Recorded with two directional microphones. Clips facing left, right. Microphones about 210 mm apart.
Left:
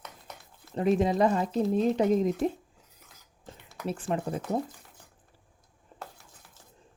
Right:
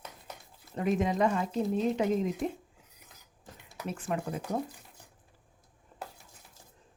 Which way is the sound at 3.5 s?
25° left (ahead or behind).